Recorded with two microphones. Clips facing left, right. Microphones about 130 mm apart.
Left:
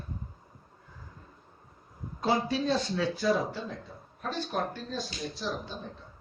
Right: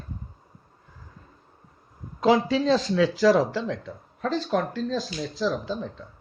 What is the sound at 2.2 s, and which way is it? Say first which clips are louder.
Speech: right 7 dB; 90° right.